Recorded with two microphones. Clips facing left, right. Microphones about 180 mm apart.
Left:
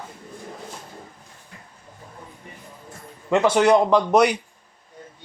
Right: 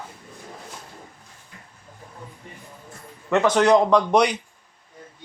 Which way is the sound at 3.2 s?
10° left (ahead or behind).